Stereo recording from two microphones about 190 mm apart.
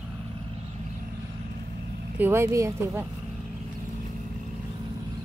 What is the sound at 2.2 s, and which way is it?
Speech, 15° right (ahead or behind).